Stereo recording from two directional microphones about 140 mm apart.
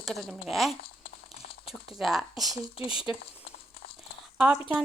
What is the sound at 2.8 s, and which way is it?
Speech, 40° left (ahead or behind).